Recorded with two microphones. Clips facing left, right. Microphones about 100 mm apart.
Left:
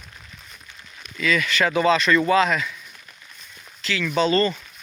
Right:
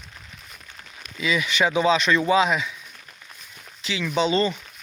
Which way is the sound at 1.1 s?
10° right (ahead or behind).